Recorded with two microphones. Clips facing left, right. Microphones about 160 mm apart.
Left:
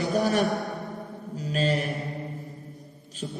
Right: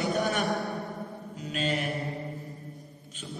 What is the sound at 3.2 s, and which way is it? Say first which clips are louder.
Speech: left 6 dB; 35° left (ahead or behind).